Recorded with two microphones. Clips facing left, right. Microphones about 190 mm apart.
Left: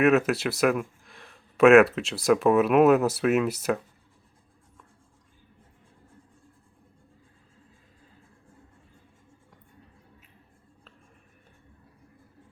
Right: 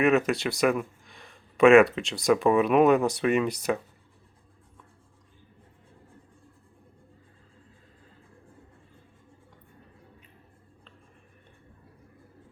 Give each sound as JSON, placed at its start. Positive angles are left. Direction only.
{"t": 0.0, "sound": "speech", "side_deg": 0}